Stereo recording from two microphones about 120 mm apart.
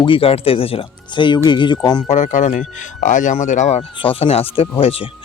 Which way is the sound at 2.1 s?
90° left.